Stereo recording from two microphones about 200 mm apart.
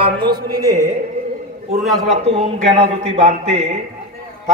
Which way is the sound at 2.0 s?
30° right (ahead or behind).